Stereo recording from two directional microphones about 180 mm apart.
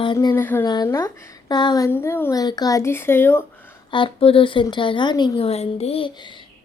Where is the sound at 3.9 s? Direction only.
30° left (ahead or behind).